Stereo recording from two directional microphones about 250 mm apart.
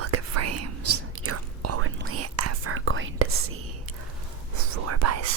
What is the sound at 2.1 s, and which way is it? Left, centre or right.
Whispering, right.